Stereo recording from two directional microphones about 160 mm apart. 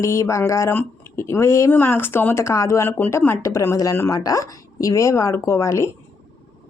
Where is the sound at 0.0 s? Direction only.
20° left (ahead or behind).